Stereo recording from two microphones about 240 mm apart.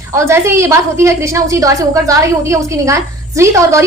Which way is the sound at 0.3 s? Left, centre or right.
Centre.